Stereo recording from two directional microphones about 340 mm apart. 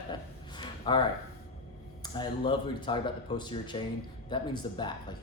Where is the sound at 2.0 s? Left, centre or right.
Centre.